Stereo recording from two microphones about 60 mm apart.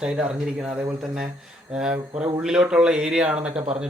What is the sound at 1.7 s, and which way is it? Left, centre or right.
Speech, centre.